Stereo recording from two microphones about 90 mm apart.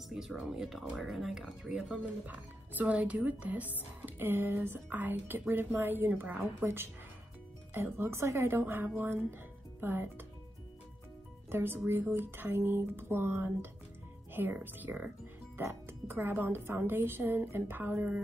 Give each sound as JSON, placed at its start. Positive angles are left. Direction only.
{"t": 0.1, "sound": "speech", "side_deg": -5}
{"t": 2.2, "sound": "speech", "side_deg": -20}
{"t": 11.5, "sound": "speech", "side_deg": -25}